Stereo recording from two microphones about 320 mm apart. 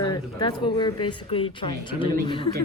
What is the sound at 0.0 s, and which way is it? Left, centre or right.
A woman's voice, centre.